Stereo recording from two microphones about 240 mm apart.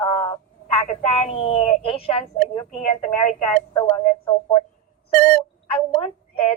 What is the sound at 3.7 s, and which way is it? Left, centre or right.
Speech, centre.